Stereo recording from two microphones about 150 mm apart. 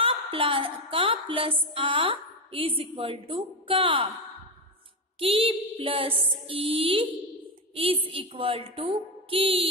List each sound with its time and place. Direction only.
0.0 s a woman's voice: 35° right (ahead or behind)
5.2 s a woman's voice: 40° right (ahead or behind)